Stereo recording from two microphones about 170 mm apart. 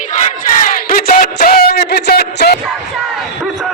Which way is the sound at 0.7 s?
60° left (ahead or behind).